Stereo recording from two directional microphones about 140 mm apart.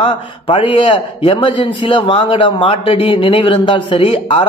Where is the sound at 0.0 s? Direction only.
40° left (ahead or behind).